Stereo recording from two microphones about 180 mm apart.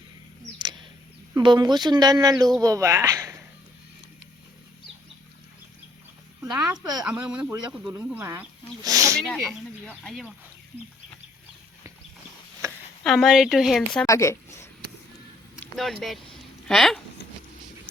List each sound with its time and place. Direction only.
0.6 s bird: 25° right (ahead or behind)
1.4 s speech: 25° right (ahead or behind)
6.7 s speech: 20° right (ahead or behind)
7.0 s speech: 5° right (ahead or behind)
9.2 s speech: 5° left (ahead or behind)
12.6 s a sound: 15° right (ahead or behind)
13.0 s speech: centre (ahead or behind)
14.1 s a sound: 15° left (ahead or behind)
15.6 s speech: centre (ahead or behind)